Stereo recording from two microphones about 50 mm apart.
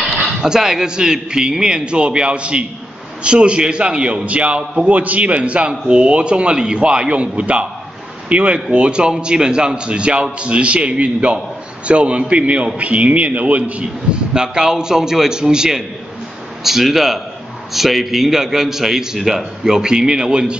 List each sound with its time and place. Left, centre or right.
0.1 s a man's voice: centre